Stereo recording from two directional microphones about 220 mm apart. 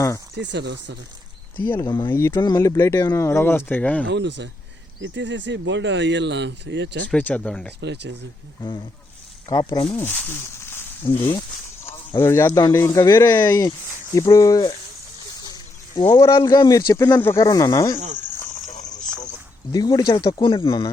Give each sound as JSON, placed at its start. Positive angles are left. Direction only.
{"t": 0.3, "sound": "speech", "side_deg": -50}
{"t": 1.8, "sound": "speech", "side_deg": 20}
{"t": 4.0, "sound": "speech", "side_deg": -55}
{"t": 7.1, "sound": "speech", "side_deg": 5}
{"t": 7.8, "sound": "speech", "side_deg": -50}
{"t": 9.5, "sound": "speech", "side_deg": 20}
{"t": 11.0, "sound": "speech", "side_deg": 25}
{"t": 12.2, "sound": "speech", "side_deg": 10}
{"t": 18.4, "sound": "cricket", "side_deg": 35}
{"t": 18.9, "sound": "a sound", "side_deg": 5}
{"t": 19.7, "sound": "speech", "side_deg": 15}